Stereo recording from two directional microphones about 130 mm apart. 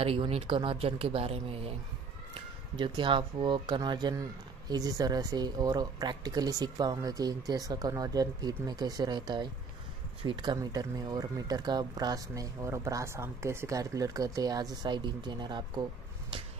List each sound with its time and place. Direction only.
0.0 s speech: 50° right (ahead or behind)
2.3 s speech: 40° right (ahead or behind)